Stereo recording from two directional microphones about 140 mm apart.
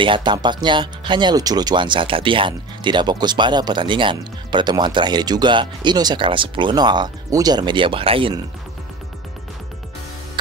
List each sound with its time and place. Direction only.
0.0 s speech: 35° right (ahead or behind)